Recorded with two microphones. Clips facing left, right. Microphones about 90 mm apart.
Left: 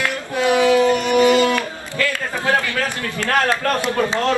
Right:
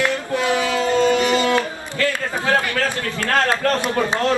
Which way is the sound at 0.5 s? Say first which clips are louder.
Left 7 dB; 20° left (ahead or behind).